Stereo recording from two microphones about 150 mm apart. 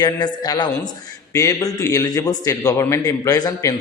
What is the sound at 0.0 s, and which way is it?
A man's voice, 30° left (ahead or behind).